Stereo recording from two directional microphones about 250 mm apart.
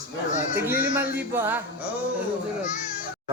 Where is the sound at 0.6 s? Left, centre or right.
Centre.